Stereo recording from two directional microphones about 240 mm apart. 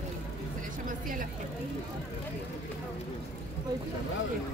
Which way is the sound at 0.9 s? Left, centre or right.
Right.